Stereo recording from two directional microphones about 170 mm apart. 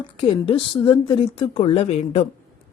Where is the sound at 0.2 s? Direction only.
30° left (ahead or behind).